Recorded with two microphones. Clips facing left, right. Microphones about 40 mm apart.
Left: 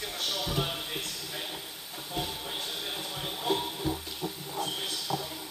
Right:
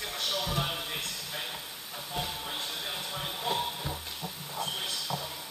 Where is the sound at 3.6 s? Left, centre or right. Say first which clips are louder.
Left 3 dB; centre.